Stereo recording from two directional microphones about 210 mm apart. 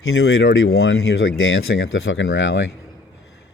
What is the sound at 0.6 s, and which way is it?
Speech, 80° left.